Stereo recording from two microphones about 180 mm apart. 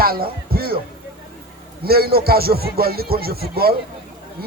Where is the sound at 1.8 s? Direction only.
60° right (ahead or behind).